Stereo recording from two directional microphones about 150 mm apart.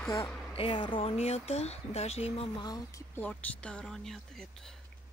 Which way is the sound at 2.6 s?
25° left (ahead or behind).